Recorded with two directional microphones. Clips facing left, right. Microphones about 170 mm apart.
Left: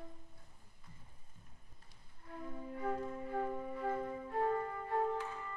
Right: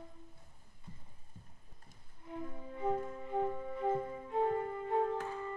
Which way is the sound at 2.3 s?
20° right (ahead or behind).